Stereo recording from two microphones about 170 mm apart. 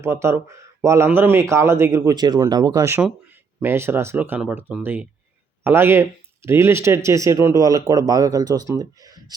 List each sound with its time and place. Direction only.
0.0 s a man's voice: 15° right (ahead or behind)